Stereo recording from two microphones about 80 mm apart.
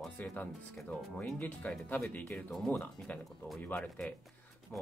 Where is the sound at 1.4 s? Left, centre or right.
Centre.